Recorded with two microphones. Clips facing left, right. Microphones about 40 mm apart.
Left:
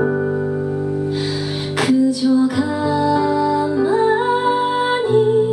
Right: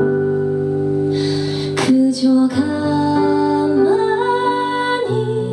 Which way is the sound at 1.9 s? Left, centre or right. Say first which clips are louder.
Right 2 dB; centre.